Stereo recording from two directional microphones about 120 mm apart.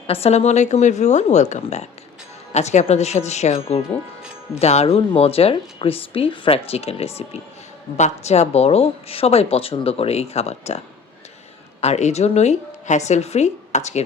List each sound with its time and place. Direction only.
0.1 s a woman's voice: 60° left (ahead or behind)
7.9 s speech: 70° left (ahead or behind)
11.8 s a woman's voice: 65° left (ahead or behind)